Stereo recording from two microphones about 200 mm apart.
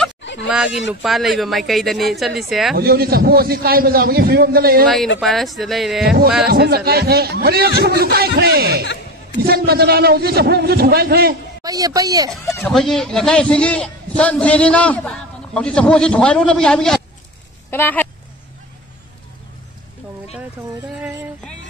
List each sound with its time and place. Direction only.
0.2 s a sound: 65° left (ahead or behind)
0.5 s speech: 5° right (ahead or behind)
2.7 s a man's voice: 50° right (ahead or behind)
4.8 s speech: centre (ahead or behind)
6.4 s a man's voice: 50° right (ahead or behind)
11.6 s a woman's voice: 20° right (ahead or behind)
12.3 s speech: 5° left (ahead or behind)